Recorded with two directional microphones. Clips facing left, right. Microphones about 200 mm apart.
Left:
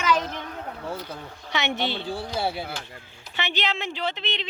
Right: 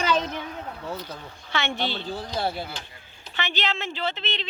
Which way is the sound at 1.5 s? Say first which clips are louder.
Left 1 dB; 20° left (ahead or behind).